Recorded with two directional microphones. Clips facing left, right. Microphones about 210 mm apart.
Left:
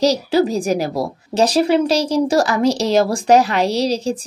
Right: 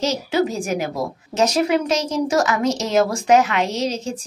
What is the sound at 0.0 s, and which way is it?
A woman's voice, 35° left (ahead or behind).